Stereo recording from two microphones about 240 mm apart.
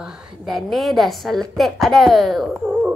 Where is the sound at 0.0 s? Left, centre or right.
Centre.